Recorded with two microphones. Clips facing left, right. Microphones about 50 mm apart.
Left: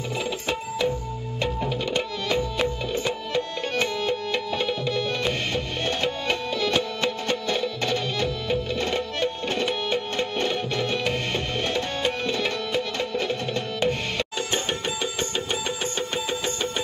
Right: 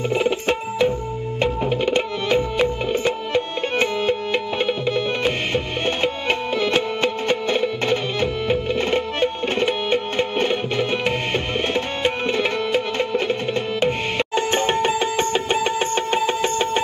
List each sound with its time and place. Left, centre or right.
0.1 s music: right